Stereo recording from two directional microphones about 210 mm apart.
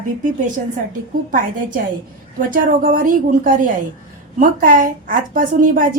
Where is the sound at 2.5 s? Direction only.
40° right (ahead or behind).